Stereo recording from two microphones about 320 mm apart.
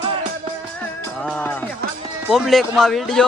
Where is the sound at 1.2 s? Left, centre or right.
Centre.